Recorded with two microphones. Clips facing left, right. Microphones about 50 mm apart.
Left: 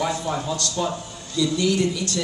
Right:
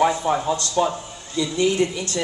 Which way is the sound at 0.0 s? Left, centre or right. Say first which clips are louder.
Right 6 dB; right.